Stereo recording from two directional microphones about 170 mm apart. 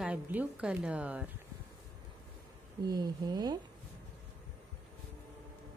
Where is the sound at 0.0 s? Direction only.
10° right (ahead or behind).